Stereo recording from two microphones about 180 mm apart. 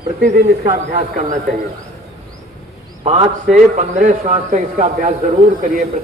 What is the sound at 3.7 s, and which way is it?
A man's voice, 45° right (ahead or behind).